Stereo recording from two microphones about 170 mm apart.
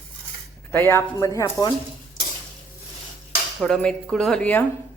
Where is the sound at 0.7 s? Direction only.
10° left (ahead or behind).